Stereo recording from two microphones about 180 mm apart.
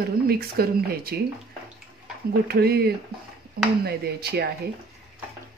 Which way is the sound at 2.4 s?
60° right (ahead or behind).